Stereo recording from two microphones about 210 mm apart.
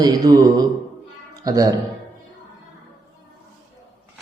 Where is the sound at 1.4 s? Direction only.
15° right (ahead or behind).